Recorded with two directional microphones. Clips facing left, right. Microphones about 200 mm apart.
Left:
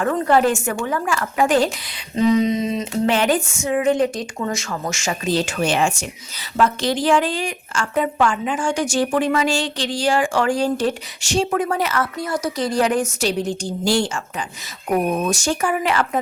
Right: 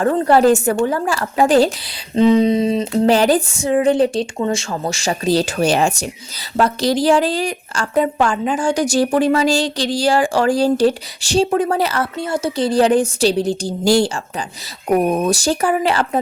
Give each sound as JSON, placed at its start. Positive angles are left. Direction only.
{"t": 0.0, "sound": "a woman's voice", "side_deg": -35}